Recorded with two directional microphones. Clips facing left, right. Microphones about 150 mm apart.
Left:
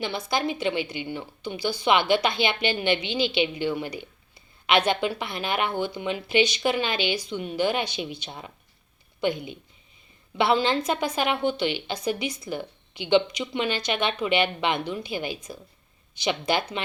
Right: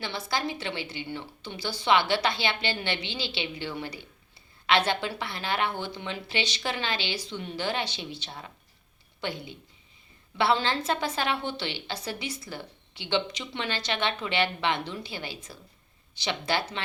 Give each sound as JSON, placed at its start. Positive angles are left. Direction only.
{"t": 0.0, "sound": "a woman's voice", "side_deg": 20}